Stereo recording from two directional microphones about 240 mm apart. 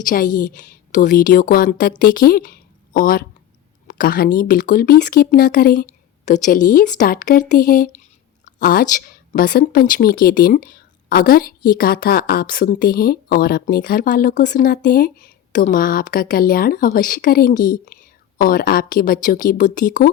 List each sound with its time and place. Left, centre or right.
0.0 s a woman's voice: left